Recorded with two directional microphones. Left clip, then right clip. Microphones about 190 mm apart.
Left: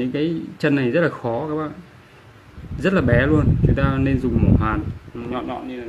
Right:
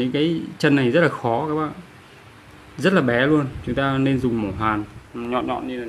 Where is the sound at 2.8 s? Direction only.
10° right (ahead or behind).